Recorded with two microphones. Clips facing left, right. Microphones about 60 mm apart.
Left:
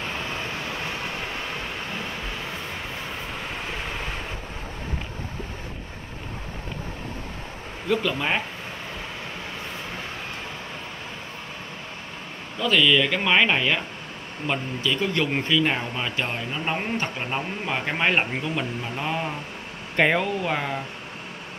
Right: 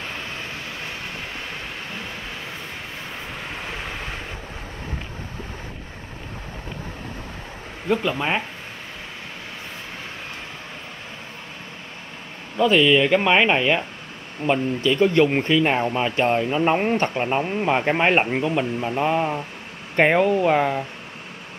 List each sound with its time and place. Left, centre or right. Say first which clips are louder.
7.9 s speech: right 2 dB; right
12.5 s speech: right 4 dB; right
17.2 s speech: right 7 dB; right